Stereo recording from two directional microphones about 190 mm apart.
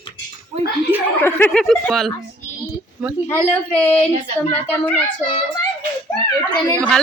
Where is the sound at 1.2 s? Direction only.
10° left (ahead or behind).